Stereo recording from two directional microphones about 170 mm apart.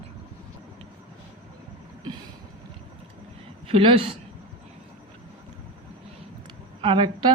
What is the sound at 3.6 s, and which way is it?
Speech, 35° right (ahead or behind).